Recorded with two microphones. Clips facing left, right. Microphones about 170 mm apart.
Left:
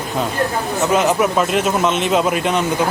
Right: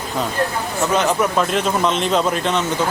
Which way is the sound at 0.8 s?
5° left (ahead or behind).